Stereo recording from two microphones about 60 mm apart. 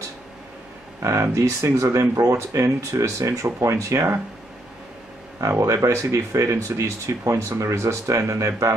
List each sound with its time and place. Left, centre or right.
1.0 s speech: right
5.4 s speech: right